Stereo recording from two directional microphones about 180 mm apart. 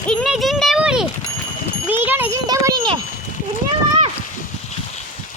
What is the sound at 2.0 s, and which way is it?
Speech, 10° right (ahead or behind).